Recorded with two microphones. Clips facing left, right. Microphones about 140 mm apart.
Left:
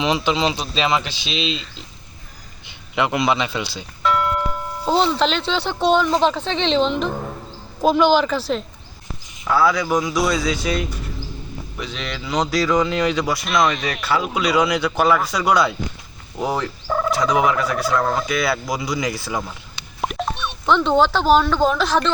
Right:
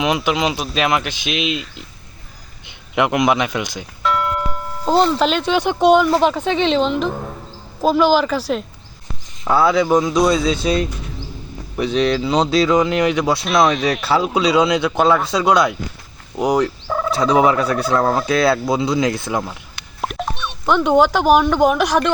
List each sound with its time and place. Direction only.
0.0 s speech: 10° right (ahead or behind)
4.0 s speech: centre (ahead or behind)
9.5 s speech: 25° right (ahead or behind)
11.9 s speech: 35° right (ahead or behind)
13.7 s speech: centre (ahead or behind)
14.3 s speech: 25° right (ahead or behind)
16.8 s turkey: centre (ahead or behind)
17.2 s speech: 30° right (ahead or behind)
20.0 s a sound: centre (ahead or behind)
20.7 s speech: 10° right (ahead or behind)